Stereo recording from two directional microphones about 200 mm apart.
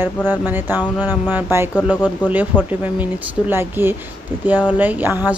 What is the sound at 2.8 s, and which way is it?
Speech, 10° right (ahead or behind).